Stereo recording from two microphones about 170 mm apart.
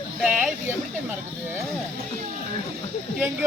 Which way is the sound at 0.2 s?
5° right (ahead or behind).